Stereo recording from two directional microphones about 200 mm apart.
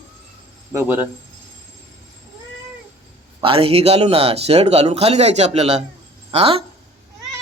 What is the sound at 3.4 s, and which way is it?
Speech, 30° right (ahead or behind).